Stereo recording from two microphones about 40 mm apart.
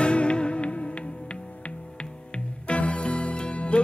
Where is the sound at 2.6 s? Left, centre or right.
Left.